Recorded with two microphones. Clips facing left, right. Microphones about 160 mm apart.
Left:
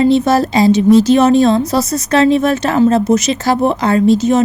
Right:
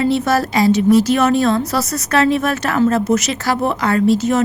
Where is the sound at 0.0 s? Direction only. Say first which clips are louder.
Left 5 dB; 20° left (ahead or behind).